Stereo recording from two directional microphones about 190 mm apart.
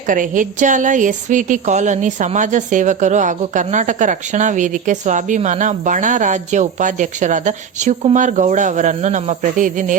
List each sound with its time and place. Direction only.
0.1 s a woman's voice: 45° right (ahead or behind)